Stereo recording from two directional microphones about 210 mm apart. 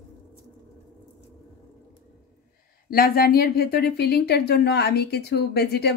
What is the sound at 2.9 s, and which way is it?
Speech, 45° left (ahead or behind).